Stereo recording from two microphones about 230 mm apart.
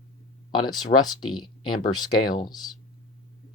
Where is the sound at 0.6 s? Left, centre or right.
Centre.